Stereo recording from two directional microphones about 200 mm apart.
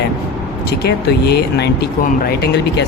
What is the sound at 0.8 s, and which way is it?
Speech, 55° left (ahead or behind).